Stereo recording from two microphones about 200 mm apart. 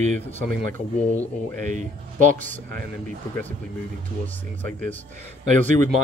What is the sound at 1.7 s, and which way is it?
Speech, 40° right (ahead or behind).